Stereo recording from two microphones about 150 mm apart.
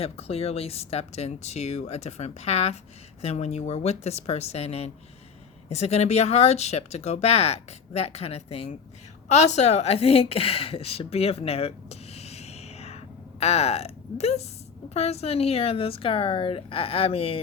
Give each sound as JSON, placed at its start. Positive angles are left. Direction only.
{"t": 0.0, "sound": "a woman's voice", "side_deg": 40}